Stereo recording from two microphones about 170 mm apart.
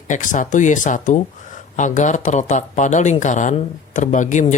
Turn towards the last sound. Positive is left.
turn(degrees=45)  # may be behind; listen again after turning